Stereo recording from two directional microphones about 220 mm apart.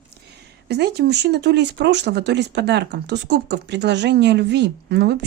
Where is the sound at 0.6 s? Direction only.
50° right (ahead or behind).